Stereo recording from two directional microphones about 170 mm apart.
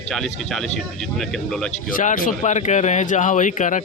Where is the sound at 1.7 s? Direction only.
50° left (ahead or behind).